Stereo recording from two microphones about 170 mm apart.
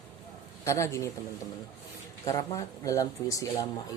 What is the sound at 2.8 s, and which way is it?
Speech, 20° left (ahead or behind).